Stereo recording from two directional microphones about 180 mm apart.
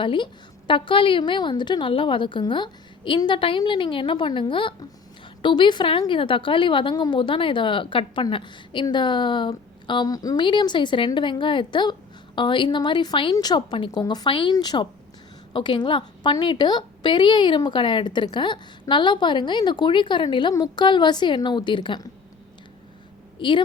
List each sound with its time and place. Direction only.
0.0 s a woman's voice: 30° left (ahead or behind)
23.4 s a woman's voice: 30° left (ahead or behind)